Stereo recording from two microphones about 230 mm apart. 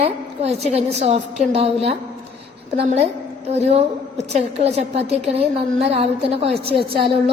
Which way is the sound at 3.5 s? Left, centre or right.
Right.